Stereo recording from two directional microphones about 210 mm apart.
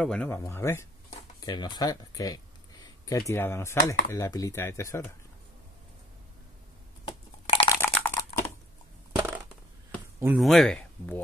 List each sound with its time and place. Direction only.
0.0 s speech: 5° left (ahead or behind)
7.1 s crushing: 25° left (ahead or behind)
7.8 s typing: 10° left (ahead or behind)
10.2 s speech: centre (ahead or behind)